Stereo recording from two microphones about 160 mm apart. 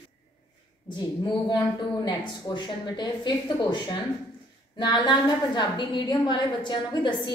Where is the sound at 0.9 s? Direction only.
30° left (ahead or behind).